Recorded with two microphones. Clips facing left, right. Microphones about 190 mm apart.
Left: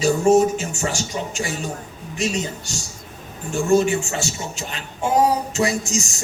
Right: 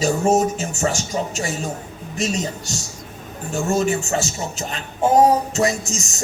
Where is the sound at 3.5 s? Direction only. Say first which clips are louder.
Left 3 dB; 35° right (ahead or behind).